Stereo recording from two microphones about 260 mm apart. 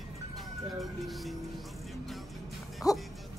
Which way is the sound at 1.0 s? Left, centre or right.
Centre.